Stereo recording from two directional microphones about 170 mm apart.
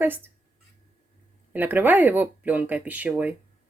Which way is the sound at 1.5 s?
10° right (ahead or behind).